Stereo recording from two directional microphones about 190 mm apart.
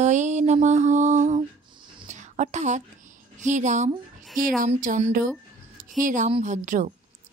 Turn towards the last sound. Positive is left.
turn(degrees=-40)  # may be behind; listen again after turning